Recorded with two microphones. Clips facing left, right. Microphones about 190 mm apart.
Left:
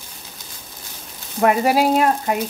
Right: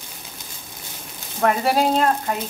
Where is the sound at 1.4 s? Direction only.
10° left (ahead or behind).